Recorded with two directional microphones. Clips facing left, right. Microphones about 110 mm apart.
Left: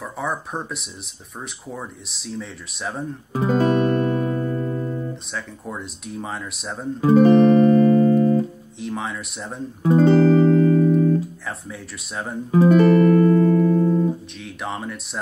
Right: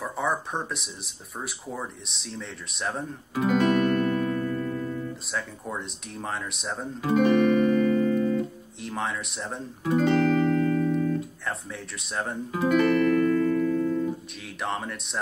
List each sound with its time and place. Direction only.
0.0 s speech: centre (ahead or behind)
3.3 s music: 30° left (ahead or behind)
5.3 s speech: centre (ahead or behind)
7.1 s music: 35° left (ahead or behind)
8.8 s speech: centre (ahead or behind)
9.8 s music: 35° left (ahead or behind)
11.4 s speech: centre (ahead or behind)
12.4 s music: 35° left (ahead or behind)
14.4 s speech: centre (ahead or behind)